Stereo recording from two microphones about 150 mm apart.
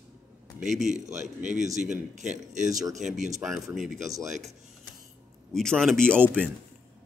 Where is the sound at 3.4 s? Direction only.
Centre (ahead or behind).